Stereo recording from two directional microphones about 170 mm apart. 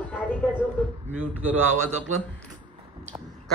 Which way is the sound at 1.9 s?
40° right (ahead or behind).